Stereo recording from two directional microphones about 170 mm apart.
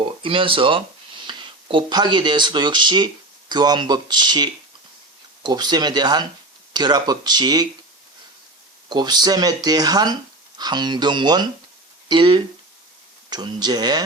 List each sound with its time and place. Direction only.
0.0 s speech: 30° right (ahead or behind)
8.9 s speech: 25° right (ahead or behind)